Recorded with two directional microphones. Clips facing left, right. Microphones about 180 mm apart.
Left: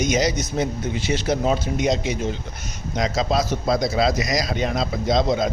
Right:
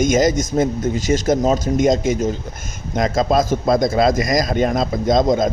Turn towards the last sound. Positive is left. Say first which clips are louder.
# right 5 dB
turn(degrees=-45)  # may be behind; listen again after turning